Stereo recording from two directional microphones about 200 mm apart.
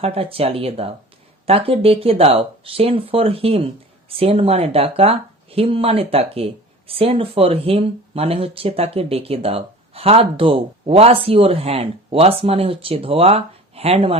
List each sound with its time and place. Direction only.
0.0 s speech: 30° right (ahead or behind)